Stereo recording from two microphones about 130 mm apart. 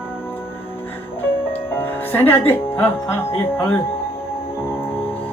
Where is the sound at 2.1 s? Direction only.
15° left (ahead or behind).